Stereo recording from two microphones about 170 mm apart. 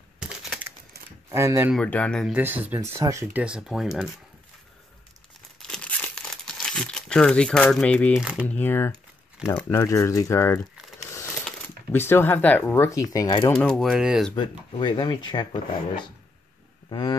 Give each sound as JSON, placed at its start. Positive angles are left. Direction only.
{"t": 0.2, "sound": "crumpling", "side_deg": -5}
{"t": 1.3, "sound": "speech", "side_deg": -15}
{"t": 1.7, "sound": "speech", "side_deg": 5}
{"t": 2.3, "sound": "speech", "side_deg": -10}
{"t": 3.4, "sound": "speech", "side_deg": -5}
{"t": 5.6, "sound": "crumpling", "side_deg": 5}
{"t": 8.5, "sound": "speech", "side_deg": 10}
{"t": 11.9, "sound": "speech", "side_deg": 15}
{"t": 13.5, "sound": "speech", "side_deg": 5}
{"t": 14.3, "sound": "speech", "side_deg": 25}